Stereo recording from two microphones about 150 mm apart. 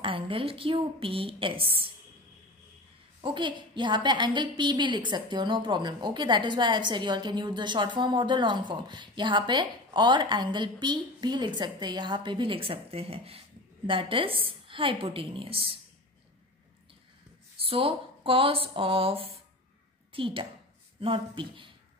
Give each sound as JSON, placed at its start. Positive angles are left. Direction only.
{"t": 0.0, "sound": "a woman's voice", "side_deg": -35}
{"t": 3.2, "sound": "a woman's voice", "side_deg": -35}
{"t": 17.6, "sound": "a woman's voice", "side_deg": -40}